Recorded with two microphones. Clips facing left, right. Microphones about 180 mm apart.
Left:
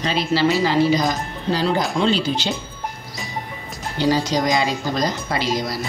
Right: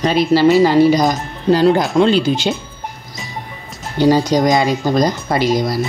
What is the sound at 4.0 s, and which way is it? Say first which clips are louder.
Speech: right 7 dB; 50° right (ahead or behind).